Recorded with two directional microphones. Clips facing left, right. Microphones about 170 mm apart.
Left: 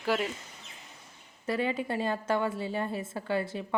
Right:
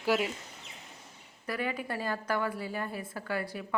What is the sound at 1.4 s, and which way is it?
A woman's voice, 25° left (ahead or behind).